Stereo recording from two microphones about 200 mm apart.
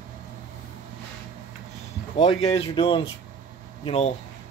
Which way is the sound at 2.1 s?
30° left (ahead or behind).